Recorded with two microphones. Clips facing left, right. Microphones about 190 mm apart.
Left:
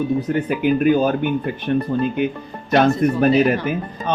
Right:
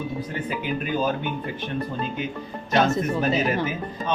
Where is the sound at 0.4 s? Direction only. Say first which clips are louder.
Left 13 dB; 60° left (ahead or behind).